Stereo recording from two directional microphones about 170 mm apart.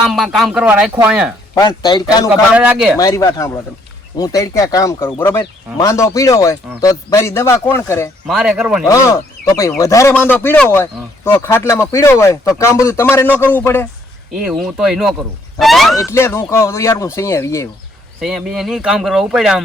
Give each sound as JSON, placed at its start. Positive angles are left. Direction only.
{"t": 0.0, "sound": "a man's voice", "side_deg": 0}
{"t": 1.5, "sound": "speech", "side_deg": 25}
{"t": 2.5, "sound": "a man's voice", "side_deg": -5}
{"t": 3.0, "sound": "speech", "side_deg": 20}
{"t": 8.3, "sound": "speech", "side_deg": 0}
{"t": 8.9, "sound": "speech", "side_deg": 20}
{"t": 14.3, "sound": "speech", "side_deg": -5}
{"t": 16.0, "sound": "speech", "side_deg": 15}
{"t": 18.2, "sound": "speech", "side_deg": 0}